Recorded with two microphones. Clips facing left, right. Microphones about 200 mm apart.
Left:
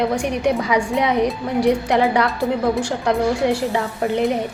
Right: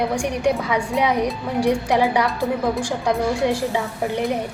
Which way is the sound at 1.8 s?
60° left (ahead or behind).